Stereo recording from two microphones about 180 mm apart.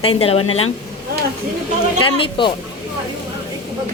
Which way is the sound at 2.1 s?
30° left (ahead or behind).